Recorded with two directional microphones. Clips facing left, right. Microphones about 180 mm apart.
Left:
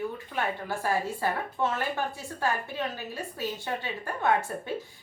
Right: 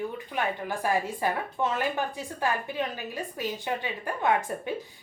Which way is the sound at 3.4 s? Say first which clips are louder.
Right 1 dB; 15° right (ahead or behind).